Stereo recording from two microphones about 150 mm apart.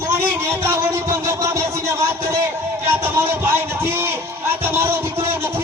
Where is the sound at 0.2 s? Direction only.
15° right (ahead or behind).